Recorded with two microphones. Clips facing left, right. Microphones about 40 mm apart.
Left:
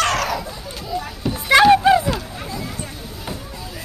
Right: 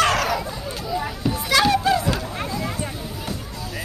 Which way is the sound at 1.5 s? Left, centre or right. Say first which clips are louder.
Left 7 dB; left.